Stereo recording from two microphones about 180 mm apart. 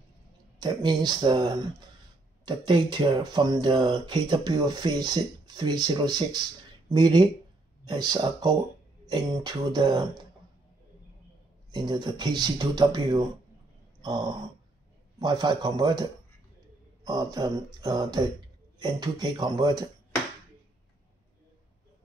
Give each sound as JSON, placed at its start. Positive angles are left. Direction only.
{"t": 0.6, "sound": "speech", "side_deg": -25}
{"t": 11.7, "sound": "speech", "side_deg": -25}
{"t": 15.1, "sound": "a man's voice", "side_deg": -25}